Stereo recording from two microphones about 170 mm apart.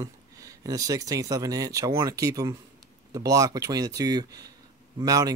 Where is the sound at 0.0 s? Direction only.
20° right (ahead or behind).